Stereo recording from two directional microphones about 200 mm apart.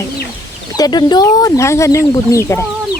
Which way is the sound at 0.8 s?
20° left (ahead or behind).